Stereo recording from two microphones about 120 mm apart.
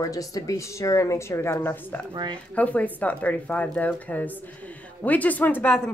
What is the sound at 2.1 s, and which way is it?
Speech, 40° right (ahead or behind).